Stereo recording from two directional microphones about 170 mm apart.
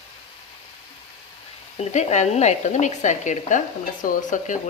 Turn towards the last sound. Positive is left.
turn(degrees=50)  # may be behind; listen again after turning